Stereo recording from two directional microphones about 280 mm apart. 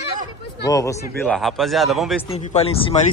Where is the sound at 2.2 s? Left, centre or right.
Left.